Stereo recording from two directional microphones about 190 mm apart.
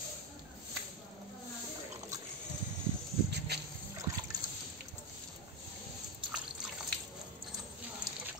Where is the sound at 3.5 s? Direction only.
60° right (ahead or behind).